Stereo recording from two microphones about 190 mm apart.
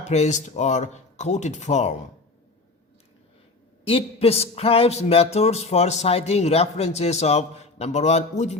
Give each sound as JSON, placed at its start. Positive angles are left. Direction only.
{"t": 0.0, "sound": "speech", "side_deg": 35}
{"t": 3.8, "sound": "speech", "side_deg": 30}